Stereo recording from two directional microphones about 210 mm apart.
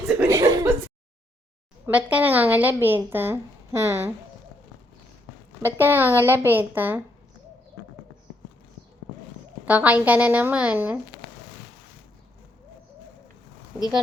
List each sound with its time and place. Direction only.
0.1 s chuckle: 5° right (ahead or behind)
0.3 s chuckle: 15° right (ahead or behind)
1.9 s a woman's voice: 5° right (ahead or behind)
5.6 s a woman's voice: 10° right (ahead or behind)
9.6 s a woman's voice: 5° right (ahead or behind)